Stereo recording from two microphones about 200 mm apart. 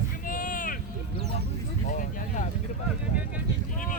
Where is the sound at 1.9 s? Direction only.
40° left (ahead or behind).